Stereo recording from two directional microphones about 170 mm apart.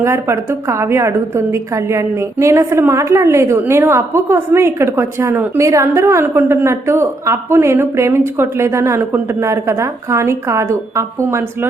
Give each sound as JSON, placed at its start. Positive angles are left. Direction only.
{"t": 0.0, "sound": "a woman's voice", "side_deg": -15}